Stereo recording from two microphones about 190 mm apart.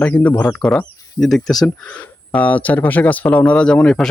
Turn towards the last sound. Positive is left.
turn(degrees=5)  # may be behind; listen again after turning